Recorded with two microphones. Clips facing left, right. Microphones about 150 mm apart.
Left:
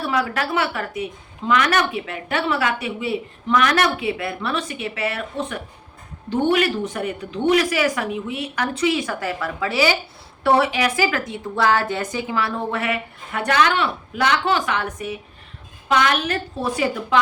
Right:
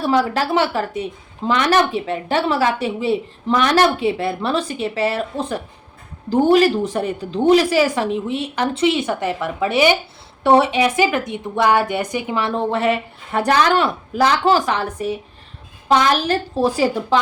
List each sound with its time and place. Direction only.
0.0 s a woman's voice: 30° right (ahead or behind)